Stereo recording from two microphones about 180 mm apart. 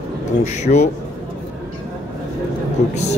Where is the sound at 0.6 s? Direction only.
40° left (ahead or behind).